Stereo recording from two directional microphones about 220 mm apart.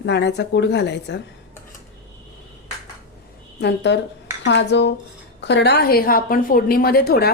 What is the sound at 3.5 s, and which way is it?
A woman's voice, 50° left (ahead or behind).